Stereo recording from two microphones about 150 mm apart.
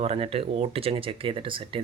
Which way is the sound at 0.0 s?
40° right (ahead or behind).